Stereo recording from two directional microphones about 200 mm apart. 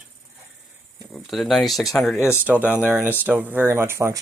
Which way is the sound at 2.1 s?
10° left (ahead or behind).